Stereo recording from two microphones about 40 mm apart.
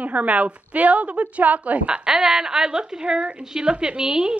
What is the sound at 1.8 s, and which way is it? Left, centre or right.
A woman's voice, right.